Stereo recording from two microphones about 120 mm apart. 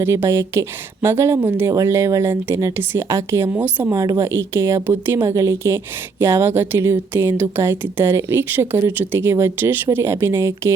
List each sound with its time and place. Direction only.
0.0 s a woman's voice: 20° right (ahead or behind)